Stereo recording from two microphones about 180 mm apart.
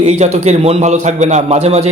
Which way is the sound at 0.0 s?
40° right (ahead or behind).